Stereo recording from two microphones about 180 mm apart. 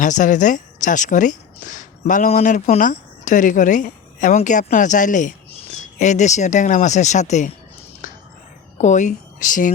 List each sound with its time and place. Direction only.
0.0 s a woman's voice: 45° left (ahead or behind)
8.0 s whispering: 45° left (ahead or behind)
8.8 s speech: 40° left (ahead or behind)